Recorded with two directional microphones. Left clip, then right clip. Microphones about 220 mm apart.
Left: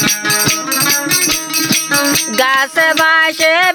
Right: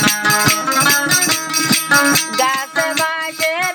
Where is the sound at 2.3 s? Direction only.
50° left (ahead or behind).